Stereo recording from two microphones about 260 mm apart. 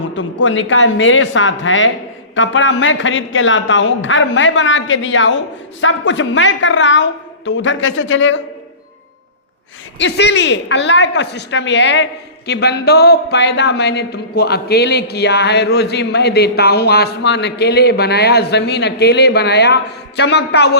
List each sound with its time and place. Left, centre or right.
0.4 s a woman's voice: left
10.0 s a woman's voice: left